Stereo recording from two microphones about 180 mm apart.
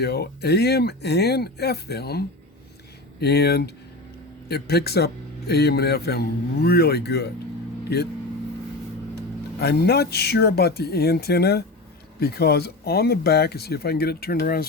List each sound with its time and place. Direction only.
0.0 s a man's voice: 65° left (ahead or behind)
9.6 s a man's voice: 65° left (ahead or behind)